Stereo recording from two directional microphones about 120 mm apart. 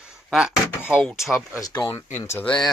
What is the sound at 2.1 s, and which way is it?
Speech, 25° left (ahead or behind).